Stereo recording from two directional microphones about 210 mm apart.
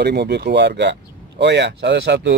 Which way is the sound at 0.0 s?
55° right (ahead or behind).